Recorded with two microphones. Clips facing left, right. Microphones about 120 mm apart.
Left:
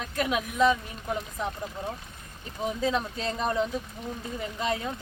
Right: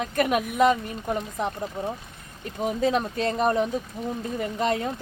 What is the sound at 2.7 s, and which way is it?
Speech, 55° right (ahead or behind).